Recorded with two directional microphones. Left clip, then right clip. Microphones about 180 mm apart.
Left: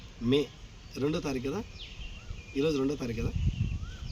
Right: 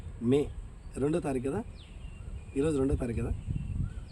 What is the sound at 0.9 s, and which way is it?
Speech, 15° right (ahead or behind).